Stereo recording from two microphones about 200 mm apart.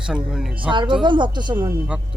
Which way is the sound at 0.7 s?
25° right (ahead or behind).